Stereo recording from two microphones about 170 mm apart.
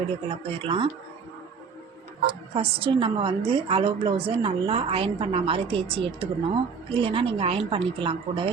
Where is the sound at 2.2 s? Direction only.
30° right (ahead or behind).